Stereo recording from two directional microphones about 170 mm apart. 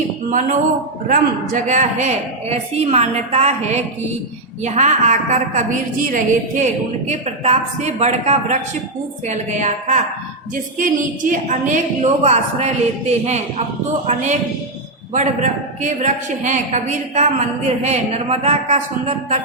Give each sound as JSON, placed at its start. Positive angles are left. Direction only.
{"t": 0.3, "sound": "a woman's voice", "side_deg": -50}